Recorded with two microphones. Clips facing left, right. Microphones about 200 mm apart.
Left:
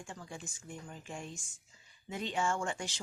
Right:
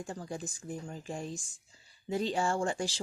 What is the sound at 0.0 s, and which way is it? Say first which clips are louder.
Speech: right 7 dB; 40° right (ahead or behind).